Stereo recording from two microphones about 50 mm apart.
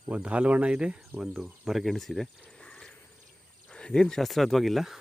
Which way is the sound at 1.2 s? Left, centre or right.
Centre.